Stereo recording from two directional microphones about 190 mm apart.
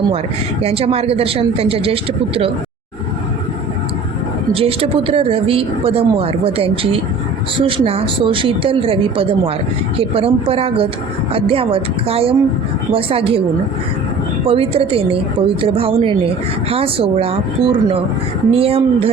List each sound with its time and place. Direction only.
0.6 s speech: 30° right (ahead or behind)
4.5 s speech: 30° right (ahead or behind)
14.4 s speech: 30° right (ahead or behind)